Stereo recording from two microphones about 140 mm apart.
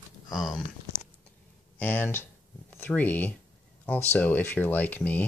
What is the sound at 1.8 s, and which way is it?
Speech, 15° left (ahead or behind).